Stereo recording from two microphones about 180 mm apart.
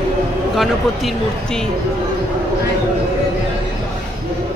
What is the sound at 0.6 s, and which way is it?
Speech, centre (ahead or behind).